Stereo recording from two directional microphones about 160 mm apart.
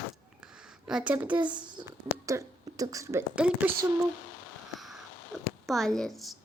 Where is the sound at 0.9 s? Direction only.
5° right (ahead or behind).